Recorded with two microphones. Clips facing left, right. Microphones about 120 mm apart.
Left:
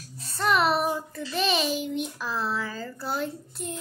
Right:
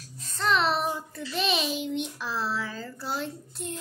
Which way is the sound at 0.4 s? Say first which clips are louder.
Left 2 dB; 5° left (ahead or behind).